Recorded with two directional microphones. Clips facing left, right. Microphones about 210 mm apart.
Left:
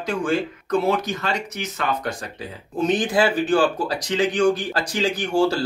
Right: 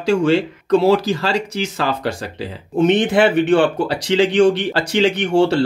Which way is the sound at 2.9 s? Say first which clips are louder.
Right 5 dB; 60° right (ahead or behind).